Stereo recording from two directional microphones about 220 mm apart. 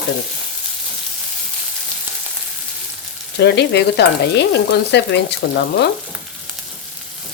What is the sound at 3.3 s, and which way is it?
A woman's voice, 50° left (ahead or behind).